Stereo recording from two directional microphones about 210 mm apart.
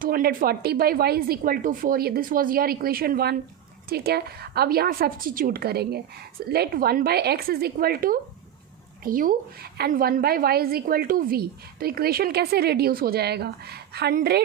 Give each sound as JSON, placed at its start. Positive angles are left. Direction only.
{"t": 0.0, "sound": "a woman's voice", "side_deg": -45}